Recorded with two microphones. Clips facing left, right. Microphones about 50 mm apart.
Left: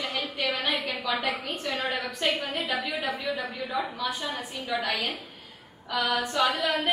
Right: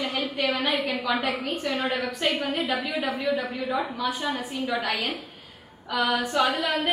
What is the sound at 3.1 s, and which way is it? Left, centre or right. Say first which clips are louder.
Speech: right 5 dB; right.